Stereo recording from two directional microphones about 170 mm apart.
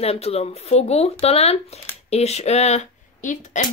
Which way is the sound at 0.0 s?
35° left (ahead or behind).